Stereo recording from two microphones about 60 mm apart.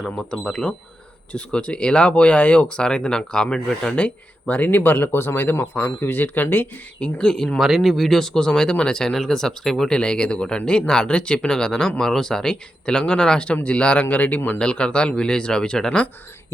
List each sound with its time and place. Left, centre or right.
0.0 s speech: centre; by 6.7 s left
7.0 s speech: centre
7.6 s speech: centre; by 14.6 s left
14.6 s speech: centre